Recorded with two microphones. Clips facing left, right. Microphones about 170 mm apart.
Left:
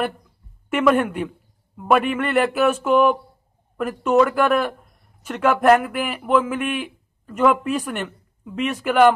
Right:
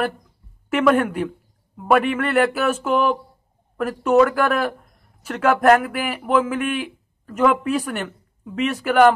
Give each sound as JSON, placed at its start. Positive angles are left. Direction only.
{"t": 0.7, "sound": "speech", "side_deg": 0}